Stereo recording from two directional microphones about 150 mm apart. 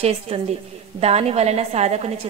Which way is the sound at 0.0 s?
45° right (ahead or behind).